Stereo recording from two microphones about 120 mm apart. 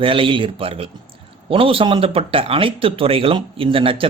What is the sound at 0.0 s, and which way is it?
Speech, 50° right (ahead or behind).